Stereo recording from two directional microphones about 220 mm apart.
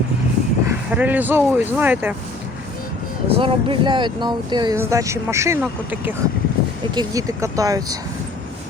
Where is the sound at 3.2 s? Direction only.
25° right (ahead or behind).